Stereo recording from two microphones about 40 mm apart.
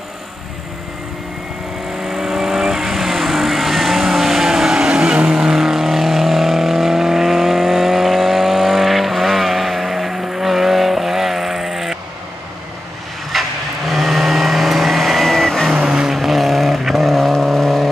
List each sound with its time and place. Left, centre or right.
2.0 s vehicle: centre
4.7 s vehicle: right; by 12.0 s centre
13.3 s vehicle: centre
15.7 s vehicle: centre
16.2 s vehicle: centre